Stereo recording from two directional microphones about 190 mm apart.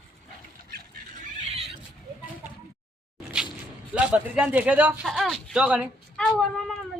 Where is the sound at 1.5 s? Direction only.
30° right (ahead or behind).